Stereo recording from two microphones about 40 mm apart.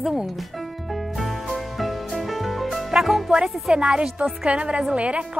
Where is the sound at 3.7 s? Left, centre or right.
Right.